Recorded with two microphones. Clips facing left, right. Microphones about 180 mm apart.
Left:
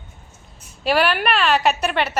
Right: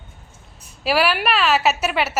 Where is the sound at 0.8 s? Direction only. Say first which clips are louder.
Left 1 dB; 5° right (ahead or behind).